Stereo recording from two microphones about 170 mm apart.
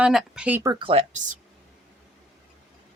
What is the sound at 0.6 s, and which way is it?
Speech, 25° right (ahead or behind).